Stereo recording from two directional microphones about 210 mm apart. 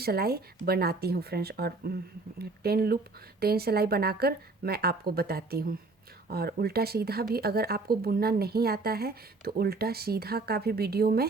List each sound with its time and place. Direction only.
0.0 s speech: 50° right (ahead or behind)